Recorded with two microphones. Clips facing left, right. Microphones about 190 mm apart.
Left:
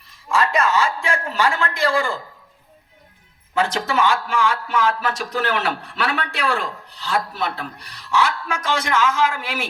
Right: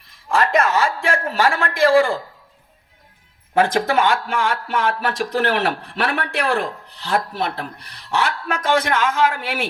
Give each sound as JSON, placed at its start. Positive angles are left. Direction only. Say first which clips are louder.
{"t": 0.3, "sound": "speech", "louder": "right 1 dB", "side_deg": -55}
{"t": 3.5, "sound": "speech", "louder": "right 4 dB", "side_deg": -55}